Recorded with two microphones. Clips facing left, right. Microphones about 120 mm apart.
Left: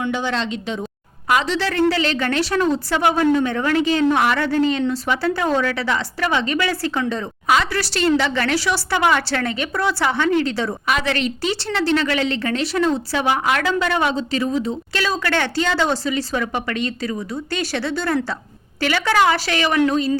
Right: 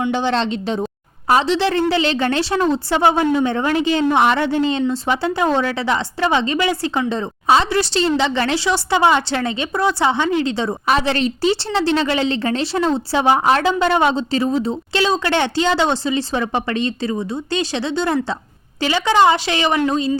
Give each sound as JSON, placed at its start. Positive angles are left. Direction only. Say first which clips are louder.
{"t": 0.1, "sound": "a woman's voice", "louder": "right 4 dB", "side_deg": -30}